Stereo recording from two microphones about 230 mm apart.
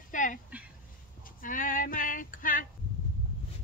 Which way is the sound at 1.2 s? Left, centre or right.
Left.